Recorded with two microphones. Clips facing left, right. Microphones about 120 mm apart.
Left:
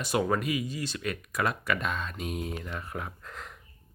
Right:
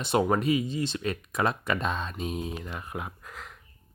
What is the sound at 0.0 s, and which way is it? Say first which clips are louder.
Speech: right 3 dB; 25° right (ahead or behind).